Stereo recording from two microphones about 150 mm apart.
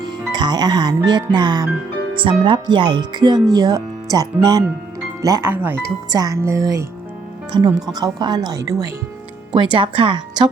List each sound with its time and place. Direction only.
0.0 s speech: 30° right (ahead or behind)
7.5 s a woman's voice: 35° right (ahead or behind)
9.7 s a woman's voice: 35° right (ahead or behind)